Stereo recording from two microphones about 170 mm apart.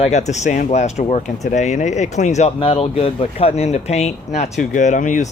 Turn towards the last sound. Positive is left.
turn(degrees=50)  # may be behind; listen again after turning